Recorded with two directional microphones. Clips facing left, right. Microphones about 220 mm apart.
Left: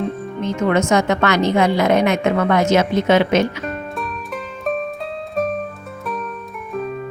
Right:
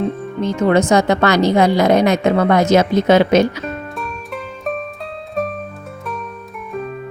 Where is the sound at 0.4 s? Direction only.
35° right (ahead or behind).